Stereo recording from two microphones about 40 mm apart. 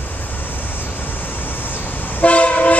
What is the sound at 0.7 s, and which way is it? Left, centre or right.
Vehicle, left.